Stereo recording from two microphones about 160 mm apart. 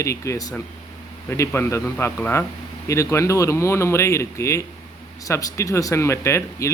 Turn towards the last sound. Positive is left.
turn(degrees=20)  # may be behind; listen again after turning